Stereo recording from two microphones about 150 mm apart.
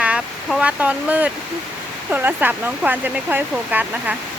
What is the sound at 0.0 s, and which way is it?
Speech, 10° right (ahead or behind).